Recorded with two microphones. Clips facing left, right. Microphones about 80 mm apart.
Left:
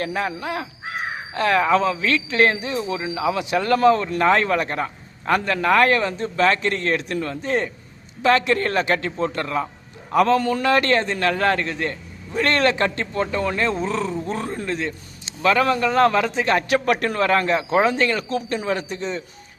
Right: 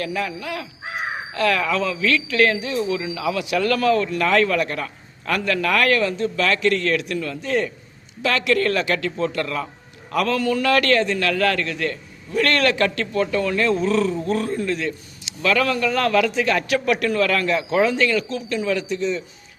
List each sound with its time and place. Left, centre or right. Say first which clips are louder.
0.0 s a man's voice: left 1 dB; left